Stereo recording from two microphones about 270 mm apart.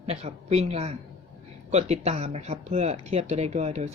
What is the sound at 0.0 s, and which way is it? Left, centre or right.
Speech, right.